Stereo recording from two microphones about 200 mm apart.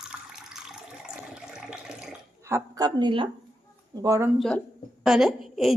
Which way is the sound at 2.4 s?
15° right (ahead or behind).